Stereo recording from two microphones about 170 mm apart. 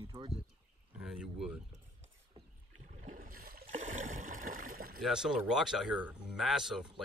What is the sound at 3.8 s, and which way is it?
Rowboat, 45° right (ahead or behind).